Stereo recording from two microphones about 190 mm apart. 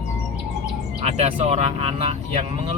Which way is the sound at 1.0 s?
35° right (ahead or behind).